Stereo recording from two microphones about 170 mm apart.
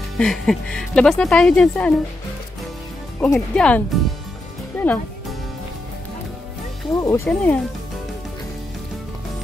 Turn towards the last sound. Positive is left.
turn(degrees=5)  # may be behind; listen again after turning